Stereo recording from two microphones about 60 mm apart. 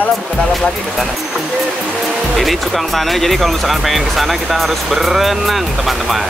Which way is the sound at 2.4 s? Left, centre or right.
Centre.